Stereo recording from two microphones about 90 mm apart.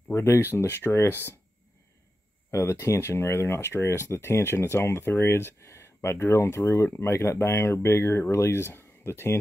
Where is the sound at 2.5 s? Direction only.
30° left (ahead or behind).